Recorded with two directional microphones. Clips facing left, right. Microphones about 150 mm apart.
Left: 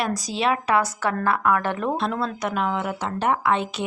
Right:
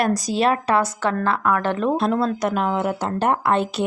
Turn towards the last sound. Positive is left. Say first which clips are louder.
# right 2 dB
turn(degrees=-40)  # may be behind; listen again after turning